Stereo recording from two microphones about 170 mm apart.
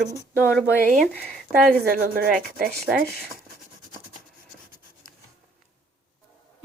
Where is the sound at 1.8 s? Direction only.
60° right (ahead or behind).